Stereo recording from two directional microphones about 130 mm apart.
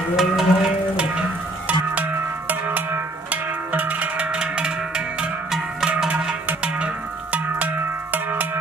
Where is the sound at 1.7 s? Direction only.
15° right (ahead or behind).